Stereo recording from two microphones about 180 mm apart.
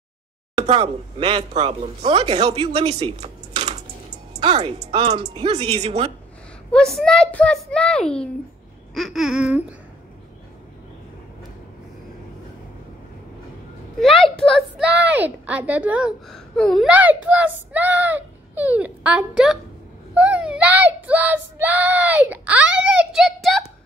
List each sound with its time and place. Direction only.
0.6 s speech: 30° right (ahead or behind)
6.7 s a child's voice: 5° left (ahead or behind)
13.9 s a child's voice: centre (ahead or behind)
14.9 s child singing: 10° right (ahead or behind)
16.8 s child singing: 10° right (ahead or behind)